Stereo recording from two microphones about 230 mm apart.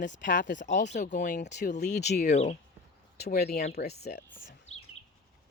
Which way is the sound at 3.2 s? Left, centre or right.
Left.